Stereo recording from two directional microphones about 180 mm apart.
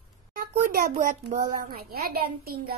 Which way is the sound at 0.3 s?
55° right (ahead or behind).